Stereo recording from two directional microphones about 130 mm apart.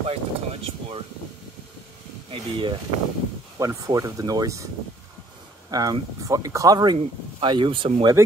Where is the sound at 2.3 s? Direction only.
40° right (ahead or behind).